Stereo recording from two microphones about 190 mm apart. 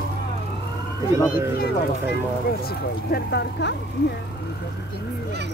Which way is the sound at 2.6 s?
60° left (ahead or behind).